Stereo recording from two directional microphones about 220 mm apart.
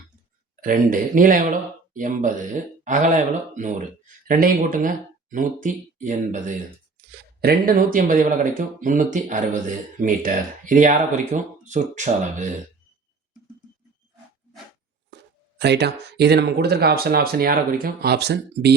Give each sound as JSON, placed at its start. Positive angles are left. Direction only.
{"t": 0.6, "sound": "speech", "side_deg": -40}
{"t": 7.0, "sound": "a sound", "side_deg": -45}
{"t": 7.4, "sound": "speech", "side_deg": -40}
{"t": 15.1, "sound": "speech", "side_deg": -50}